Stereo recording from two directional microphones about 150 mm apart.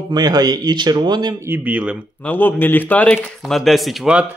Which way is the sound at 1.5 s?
10° right (ahead or behind).